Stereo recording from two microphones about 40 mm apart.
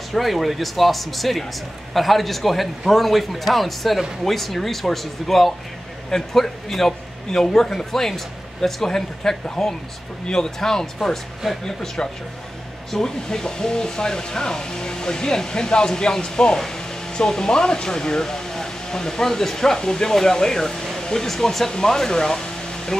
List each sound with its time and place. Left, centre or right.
0.1 s a man's voice: centre